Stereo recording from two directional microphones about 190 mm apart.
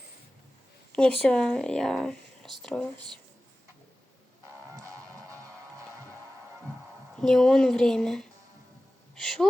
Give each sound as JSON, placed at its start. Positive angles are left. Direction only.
{"t": 0.9, "sound": "speech", "side_deg": 5}
{"t": 4.7, "sound": "music", "side_deg": -15}
{"t": 7.2, "sound": "speech", "side_deg": 5}